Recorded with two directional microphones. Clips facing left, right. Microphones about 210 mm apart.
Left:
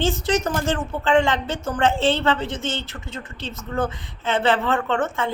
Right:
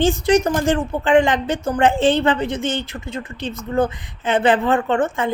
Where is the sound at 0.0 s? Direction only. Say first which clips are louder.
Right 6 dB; 15° right (ahead or behind).